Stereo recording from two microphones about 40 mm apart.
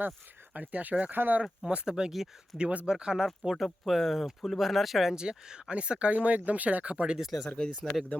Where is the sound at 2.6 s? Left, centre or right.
Right.